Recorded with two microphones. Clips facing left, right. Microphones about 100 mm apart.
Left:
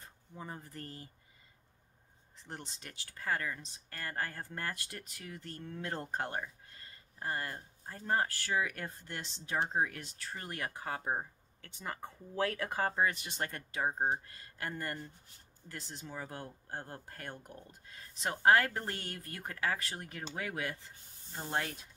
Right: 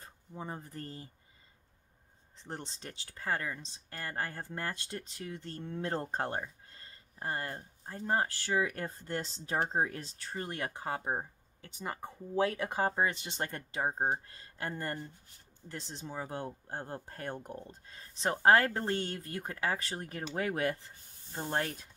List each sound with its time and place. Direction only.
0.3 s speech: 25° right (ahead or behind)
2.4 s speech: 30° right (ahead or behind)
20.3 s speech: 40° right (ahead or behind)